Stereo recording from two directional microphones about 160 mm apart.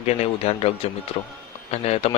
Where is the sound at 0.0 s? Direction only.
40° left (ahead or behind).